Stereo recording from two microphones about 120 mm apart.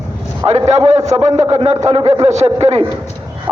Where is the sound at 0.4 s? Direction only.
65° right (ahead or behind).